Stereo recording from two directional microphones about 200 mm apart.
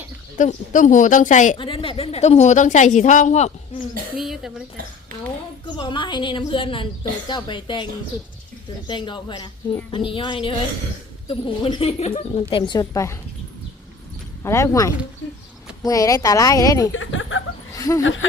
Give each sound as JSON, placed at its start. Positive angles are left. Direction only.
{"t": 0.3, "sound": "a woman's voice", "side_deg": 40}
{"t": 1.5, "sound": "a woman's voice", "side_deg": 25}
{"t": 4.2, "sound": "speech", "side_deg": 0}
{"t": 5.6, "sound": "speech", "side_deg": 25}
{"t": 8.9, "sound": "speech", "side_deg": 25}
{"t": 14.4, "sound": "speech", "side_deg": 15}
{"t": 16.9, "sound": "a sound", "side_deg": 75}
{"t": 17.7, "sound": "a sound", "side_deg": 15}
{"t": 18.0, "sound": "speech", "side_deg": 70}